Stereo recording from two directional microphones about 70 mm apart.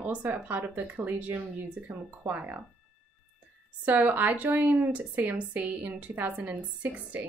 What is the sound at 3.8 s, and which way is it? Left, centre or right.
Speech, right.